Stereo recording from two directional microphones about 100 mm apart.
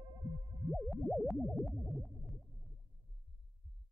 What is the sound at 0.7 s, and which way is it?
Music, centre (ahead or behind).